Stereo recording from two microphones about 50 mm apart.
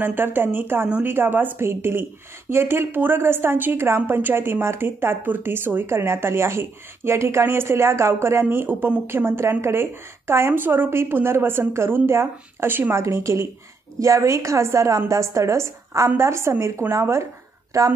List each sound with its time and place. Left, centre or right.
0.0 s speech: right
8.6 s speech: right
9.0 s speech: right
10.6 s speech: right
12.9 s a woman's voice: right
13.9 s a woman's voice: right
16.2 s a woman's voice: right
17.7 s a woman's voice: right